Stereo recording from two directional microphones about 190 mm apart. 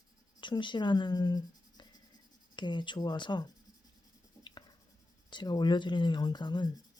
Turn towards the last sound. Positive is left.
turn(degrees=25)  # may be behind; listen again after turning